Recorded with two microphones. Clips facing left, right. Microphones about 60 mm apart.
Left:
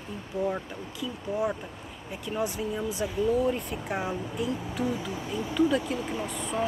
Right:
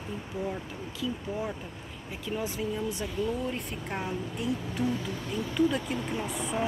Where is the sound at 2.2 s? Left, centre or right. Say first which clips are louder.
Left 2 dB; centre.